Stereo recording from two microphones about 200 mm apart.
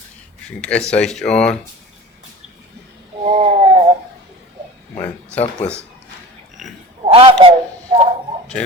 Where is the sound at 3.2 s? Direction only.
35° right (ahead or behind).